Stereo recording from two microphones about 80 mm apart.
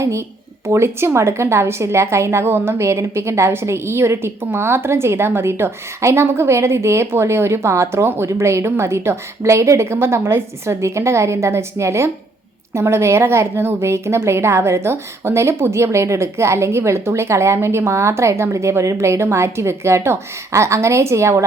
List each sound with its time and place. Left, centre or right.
0.0 s a woman's voice: right